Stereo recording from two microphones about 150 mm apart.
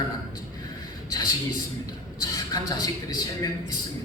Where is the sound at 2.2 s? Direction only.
25° left (ahead or behind).